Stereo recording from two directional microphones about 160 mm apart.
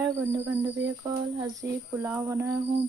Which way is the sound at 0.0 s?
15° right (ahead or behind).